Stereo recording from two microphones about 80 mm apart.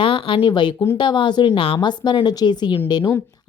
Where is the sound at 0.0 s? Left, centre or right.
Left.